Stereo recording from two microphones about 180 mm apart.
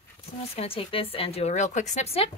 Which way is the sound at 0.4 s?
35° left (ahead or behind).